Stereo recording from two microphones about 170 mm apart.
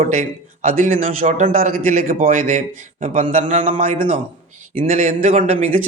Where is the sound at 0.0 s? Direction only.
50° right (ahead or behind).